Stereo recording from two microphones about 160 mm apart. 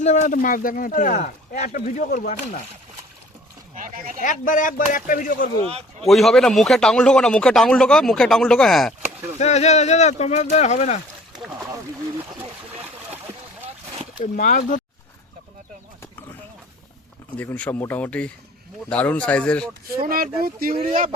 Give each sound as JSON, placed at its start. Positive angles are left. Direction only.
{"t": 0.0, "sound": "speech", "side_deg": 45}
{"t": 3.8, "sound": "a sound", "side_deg": -55}
{"t": 4.2, "sound": "speech", "side_deg": 55}
{"t": 5.6, "sound": "speech", "side_deg": -40}
{"t": 6.1, "sound": "speech", "side_deg": 0}
{"t": 9.4, "sound": "speech", "side_deg": 45}
{"t": 14.2, "sound": "speech", "side_deg": 55}
{"t": 17.3, "sound": "speech", "side_deg": 10}
{"t": 20.0, "sound": "speech", "side_deg": -65}